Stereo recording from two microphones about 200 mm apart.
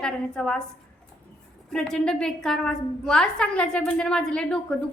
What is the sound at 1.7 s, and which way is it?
A woman's voice, 5° left (ahead or behind).